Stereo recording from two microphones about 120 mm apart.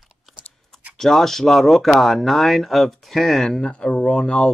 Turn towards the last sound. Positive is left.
turn(degrees=5)  # may be behind; listen again after turning